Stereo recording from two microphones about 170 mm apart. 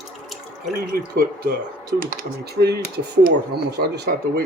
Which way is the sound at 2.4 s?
70° right (ahead or behind).